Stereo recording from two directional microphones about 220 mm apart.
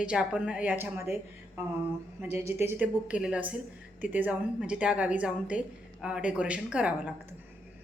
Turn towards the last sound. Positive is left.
turn(degrees=-5)  # may be behind; listen again after turning